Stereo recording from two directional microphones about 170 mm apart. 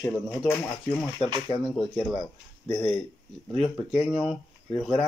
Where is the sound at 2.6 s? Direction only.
25° left (ahead or behind).